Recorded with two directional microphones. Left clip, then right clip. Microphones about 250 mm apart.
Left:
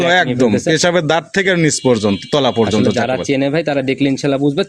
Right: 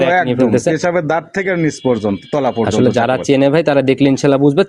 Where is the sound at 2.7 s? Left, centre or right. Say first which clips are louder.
Right 2 dB; centre.